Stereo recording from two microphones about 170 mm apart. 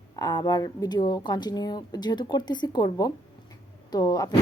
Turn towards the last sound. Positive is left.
turn(degrees=20)  # may be behind; listen again after turning